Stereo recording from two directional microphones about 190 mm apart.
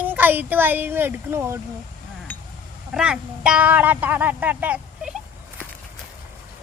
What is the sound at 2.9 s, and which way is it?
A child's voice, 5° right (ahead or behind).